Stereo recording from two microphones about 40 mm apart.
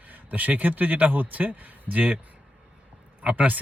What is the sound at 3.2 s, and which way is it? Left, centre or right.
Speech, right.